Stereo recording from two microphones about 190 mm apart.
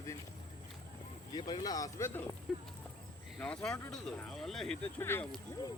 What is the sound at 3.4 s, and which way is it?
Speech, 5° left (ahead or behind).